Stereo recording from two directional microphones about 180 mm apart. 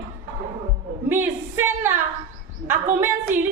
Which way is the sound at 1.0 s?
10° right (ahead or behind).